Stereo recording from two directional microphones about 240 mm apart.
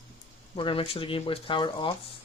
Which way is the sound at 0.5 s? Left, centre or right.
Left.